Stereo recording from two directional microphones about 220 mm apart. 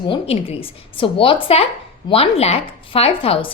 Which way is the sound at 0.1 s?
25° left (ahead or behind).